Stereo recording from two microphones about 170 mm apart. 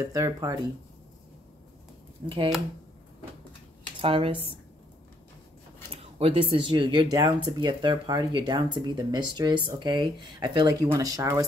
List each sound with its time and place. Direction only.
0.0 s speech: 20° right (ahead or behind)
2.2 s speech: 30° right (ahead or behind)
4.0 s speech: 30° right (ahead or behind)
6.1 s speech: 30° right (ahead or behind)